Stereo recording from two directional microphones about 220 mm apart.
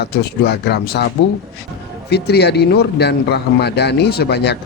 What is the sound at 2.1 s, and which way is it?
Speech, 50° left (ahead or behind).